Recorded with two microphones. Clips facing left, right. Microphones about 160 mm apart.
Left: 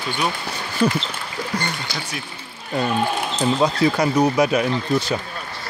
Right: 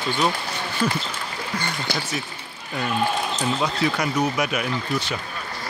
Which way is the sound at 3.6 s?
35° left (ahead or behind).